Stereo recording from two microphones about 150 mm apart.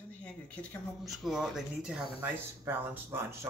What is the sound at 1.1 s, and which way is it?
Speech, 5° right (ahead or behind).